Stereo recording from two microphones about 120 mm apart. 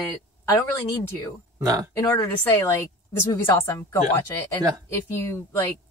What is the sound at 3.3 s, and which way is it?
Speech, 20° left (ahead or behind).